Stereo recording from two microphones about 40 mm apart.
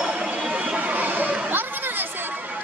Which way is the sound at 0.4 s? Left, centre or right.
Right.